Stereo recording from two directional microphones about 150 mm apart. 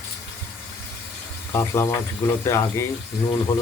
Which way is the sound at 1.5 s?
15° left (ahead or behind).